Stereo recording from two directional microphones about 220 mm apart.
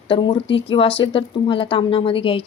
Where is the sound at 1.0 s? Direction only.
25° left (ahead or behind).